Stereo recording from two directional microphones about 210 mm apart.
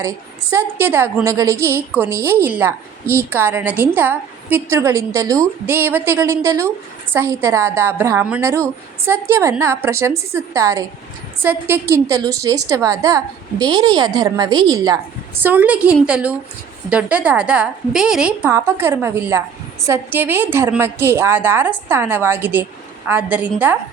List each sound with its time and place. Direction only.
0.5 s a woman's voice: 10° right (ahead or behind)
15.4 s a woman's voice: 10° right (ahead or behind)